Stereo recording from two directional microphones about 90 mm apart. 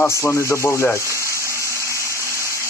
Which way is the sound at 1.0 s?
35° right (ahead or behind).